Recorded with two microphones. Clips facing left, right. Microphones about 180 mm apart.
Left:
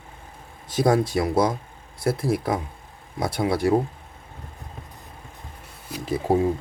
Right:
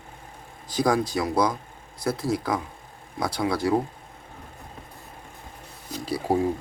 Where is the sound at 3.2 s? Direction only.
25° left (ahead or behind).